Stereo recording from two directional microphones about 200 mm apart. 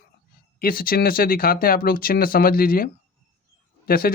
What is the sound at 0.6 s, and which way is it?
Speech, 45° left (ahead or behind).